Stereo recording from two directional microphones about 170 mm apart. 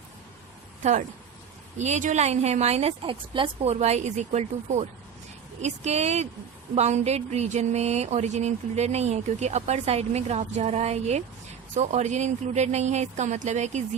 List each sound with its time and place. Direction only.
0.8 s a woman's voice: 45° right (ahead or behind)
1.8 s a sound: 45° right (ahead or behind)
11.7 s speech: 45° right (ahead or behind)